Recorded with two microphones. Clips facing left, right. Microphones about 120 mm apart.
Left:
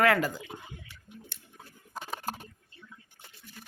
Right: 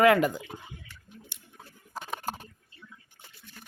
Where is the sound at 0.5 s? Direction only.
5° right (ahead or behind).